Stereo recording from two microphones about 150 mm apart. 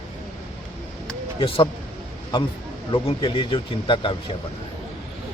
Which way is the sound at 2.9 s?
35° left (ahead or behind).